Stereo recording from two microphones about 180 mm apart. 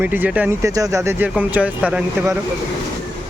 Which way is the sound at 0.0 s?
10° right (ahead or behind).